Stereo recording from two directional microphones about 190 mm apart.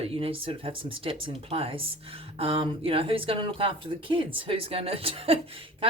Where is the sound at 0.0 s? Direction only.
30° right (ahead or behind).